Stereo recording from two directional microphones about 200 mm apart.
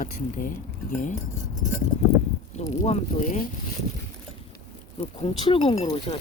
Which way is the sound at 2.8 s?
35° left (ahead or behind).